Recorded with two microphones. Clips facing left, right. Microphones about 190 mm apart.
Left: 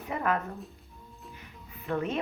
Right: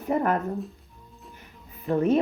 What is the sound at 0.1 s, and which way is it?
Speech, 40° right (ahead or behind).